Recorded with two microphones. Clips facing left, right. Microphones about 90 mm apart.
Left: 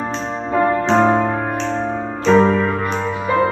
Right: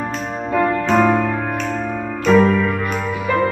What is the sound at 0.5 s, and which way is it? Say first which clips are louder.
Music: left 1 dB; 35° left (ahead or behind).